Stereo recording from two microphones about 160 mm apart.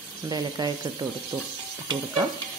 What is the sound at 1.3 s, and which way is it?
Sizzle, 10° right (ahead or behind).